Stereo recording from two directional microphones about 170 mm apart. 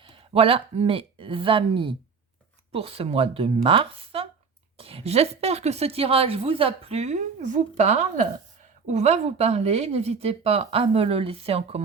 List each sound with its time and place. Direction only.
0.0 s a woman's voice: 30° right (ahead or behind)